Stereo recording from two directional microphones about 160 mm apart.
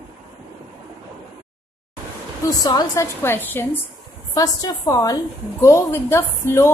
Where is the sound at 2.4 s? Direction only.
25° left (ahead or behind).